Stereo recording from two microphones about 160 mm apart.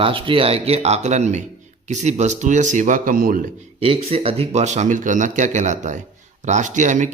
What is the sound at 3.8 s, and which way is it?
A man's voice, 35° right (ahead or behind).